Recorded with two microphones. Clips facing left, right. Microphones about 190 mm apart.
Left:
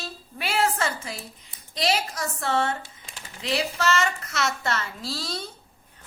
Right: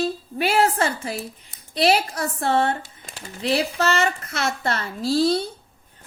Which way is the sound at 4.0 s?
55° right (ahead or behind).